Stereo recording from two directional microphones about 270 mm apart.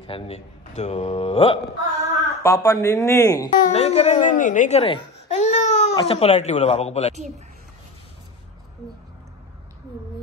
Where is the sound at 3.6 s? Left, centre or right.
Left.